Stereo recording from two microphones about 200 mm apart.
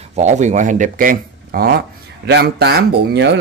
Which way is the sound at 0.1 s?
35° right (ahead or behind).